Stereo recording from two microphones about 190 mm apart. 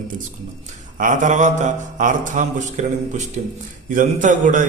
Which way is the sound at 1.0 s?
40° right (ahead or behind).